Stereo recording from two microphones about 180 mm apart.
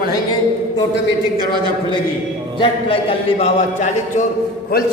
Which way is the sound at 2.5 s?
30° left (ahead or behind).